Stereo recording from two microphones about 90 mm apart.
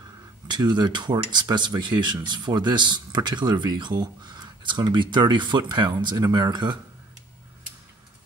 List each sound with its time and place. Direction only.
0.5 s speech: 50° right (ahead or behind)